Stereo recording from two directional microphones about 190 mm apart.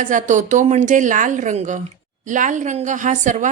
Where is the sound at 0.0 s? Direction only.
40° right (ahead or behind).